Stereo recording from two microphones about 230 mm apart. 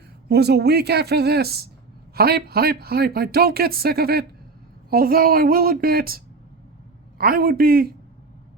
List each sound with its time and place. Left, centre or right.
0.3 s speech: right